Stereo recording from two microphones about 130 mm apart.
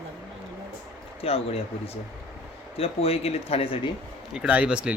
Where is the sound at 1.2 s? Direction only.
50° left (ahead or behind).